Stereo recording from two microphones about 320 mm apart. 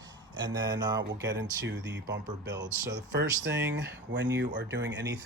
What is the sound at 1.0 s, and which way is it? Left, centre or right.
Speech, right.